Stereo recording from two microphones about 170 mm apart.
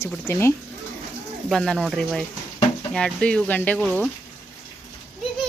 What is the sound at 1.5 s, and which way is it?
Speech, centre (ahead or behind).